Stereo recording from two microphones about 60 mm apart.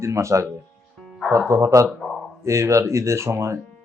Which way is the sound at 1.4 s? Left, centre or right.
Right.